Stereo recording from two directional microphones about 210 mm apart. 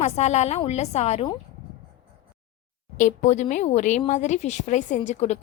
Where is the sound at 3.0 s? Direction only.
35° left (ahead or behind).